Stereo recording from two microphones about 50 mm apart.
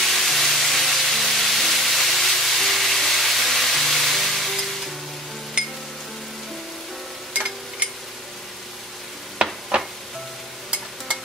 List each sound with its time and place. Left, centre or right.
0.0 s a sound: centre
5.6 s music: centre
9.7 s music: centre